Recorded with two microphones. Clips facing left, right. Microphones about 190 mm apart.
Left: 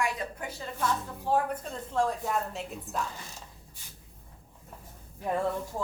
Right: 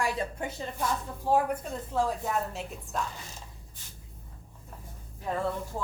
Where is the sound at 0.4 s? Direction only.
25° right (ahead or behind).